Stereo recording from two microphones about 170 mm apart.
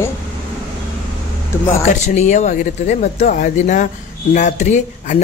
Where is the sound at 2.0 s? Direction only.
45° left (ahead or behind).